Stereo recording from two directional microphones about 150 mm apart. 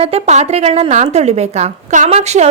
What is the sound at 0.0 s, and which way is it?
A woman's voice, 45° right (ahead or behind).